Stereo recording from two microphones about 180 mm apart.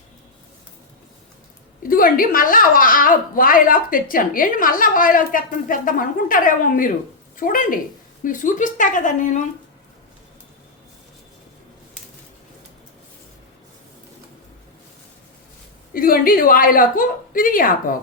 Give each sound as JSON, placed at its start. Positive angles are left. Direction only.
{"t": 1.8, "sound": "a woman's voice", "side_deg": 50}
{"t": 15.9, "sound": "a woman's voice", "side_deg": 55}